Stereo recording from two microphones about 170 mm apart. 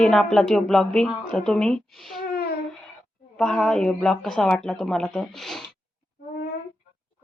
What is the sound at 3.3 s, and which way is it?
Speech, 5° left (ahead or behind).